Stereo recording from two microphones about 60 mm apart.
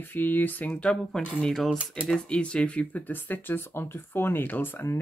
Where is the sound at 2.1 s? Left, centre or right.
Centre; by 5.0 s left.